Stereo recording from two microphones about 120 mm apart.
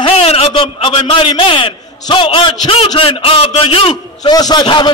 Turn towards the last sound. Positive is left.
turn(degrees=45)  # may be behind; listen again after turning